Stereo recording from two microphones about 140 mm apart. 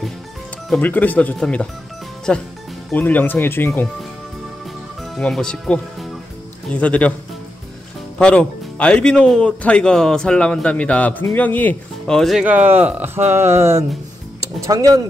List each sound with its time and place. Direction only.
0.7 s speech: 10° left (ahead or behind)
5.1 s speech: 5° left (ahead or behind)
8.2 s speech: 10° left (ahead or behind)
12.4 s speech: 10° right (ahead or behind)